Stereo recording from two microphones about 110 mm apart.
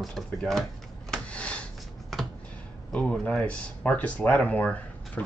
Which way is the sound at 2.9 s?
10° left (ahead or behind).